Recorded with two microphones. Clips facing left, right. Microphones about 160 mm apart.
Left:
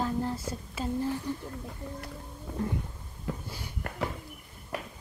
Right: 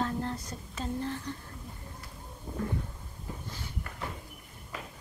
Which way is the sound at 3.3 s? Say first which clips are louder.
Left 7 dB; 90° left.